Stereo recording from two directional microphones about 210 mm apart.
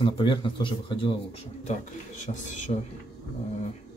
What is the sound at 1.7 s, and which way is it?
Speech, 35° left (ahead or behind).